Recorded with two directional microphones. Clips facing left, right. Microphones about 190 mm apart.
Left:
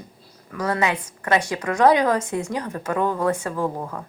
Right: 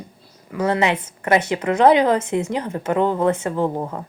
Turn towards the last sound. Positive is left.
turn(degrees=-25)  # may be behind; listen again after turning